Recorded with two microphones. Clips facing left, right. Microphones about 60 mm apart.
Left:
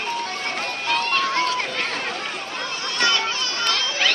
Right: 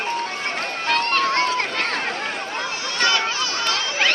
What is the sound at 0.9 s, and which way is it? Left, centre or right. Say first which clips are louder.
Music: right 2 dB; right.